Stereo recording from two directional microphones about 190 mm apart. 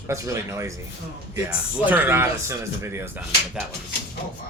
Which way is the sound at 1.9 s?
10° right (ahead or behind).